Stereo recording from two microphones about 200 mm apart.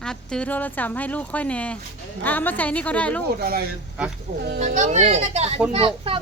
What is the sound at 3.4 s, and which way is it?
Speech, 50° right (ahead or behind).